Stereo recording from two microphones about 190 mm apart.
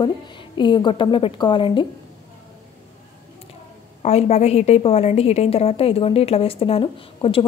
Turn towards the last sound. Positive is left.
turn(degrees=30)  # may be behind; listen again after turning